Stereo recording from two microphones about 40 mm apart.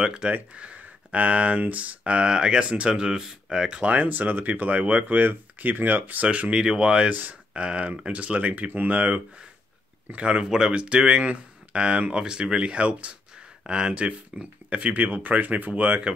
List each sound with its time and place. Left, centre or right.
0.0 s speech: right
3.8 s speech: right
6.2 s speech: right
6.5 s speech: right
10.4 s speech: centre
10.7 s speech: right
15.2 s speech: right